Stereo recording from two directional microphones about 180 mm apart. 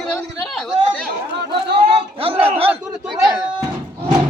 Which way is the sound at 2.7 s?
5° right (ahead or behind).